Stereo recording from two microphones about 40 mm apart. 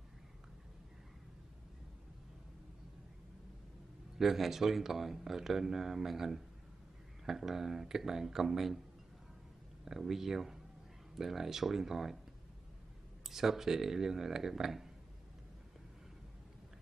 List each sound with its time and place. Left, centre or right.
4.2 s speech: centre
9.8 s speech: centre
13.3 s speech: centre